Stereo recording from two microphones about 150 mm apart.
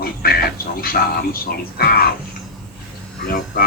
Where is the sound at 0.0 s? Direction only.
80° left.